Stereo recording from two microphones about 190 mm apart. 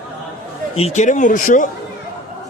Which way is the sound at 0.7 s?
35° left (ahead or behind).